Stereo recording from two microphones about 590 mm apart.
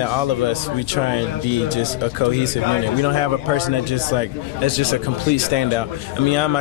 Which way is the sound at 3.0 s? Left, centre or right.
Left.